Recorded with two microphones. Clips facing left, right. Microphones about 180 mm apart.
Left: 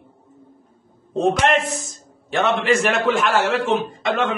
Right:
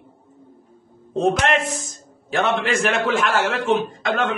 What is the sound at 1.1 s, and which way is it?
A man's voice, centre (ahead or behind).